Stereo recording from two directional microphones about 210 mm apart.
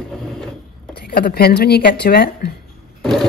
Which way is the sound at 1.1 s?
50° left (ahead or behind).